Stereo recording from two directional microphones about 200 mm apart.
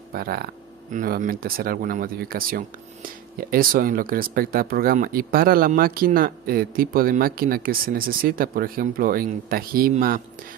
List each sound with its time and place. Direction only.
0.1 s speech: 50° right (ahead or behind)